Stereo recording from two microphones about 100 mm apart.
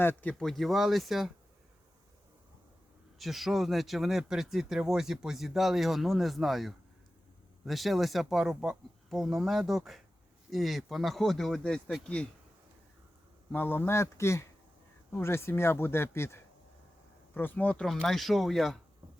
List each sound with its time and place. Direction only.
0.0 s speech: 20° left (ahead or behind)
0.3 s speech: centre (ahead or behind)
3.2 s speech: centre (ahead or behind)
13.5 s speech: 20° left (ahead or behind)
17.8 s speech: 5° left (ahead or behind)